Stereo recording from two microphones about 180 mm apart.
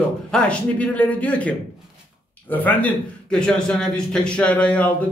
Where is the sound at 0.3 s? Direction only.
5° left (ahead or behind).